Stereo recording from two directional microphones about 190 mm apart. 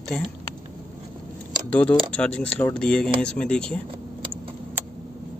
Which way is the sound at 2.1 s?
5° left (ahead or behind).